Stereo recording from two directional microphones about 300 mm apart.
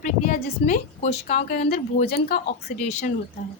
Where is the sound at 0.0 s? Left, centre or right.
Left.